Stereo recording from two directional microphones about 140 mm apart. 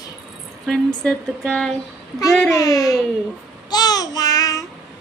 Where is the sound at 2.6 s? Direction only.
25° left (ahead or behind).